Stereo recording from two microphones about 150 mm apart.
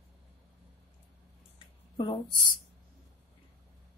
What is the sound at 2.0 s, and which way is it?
Speech, 30° left (ahead or behind).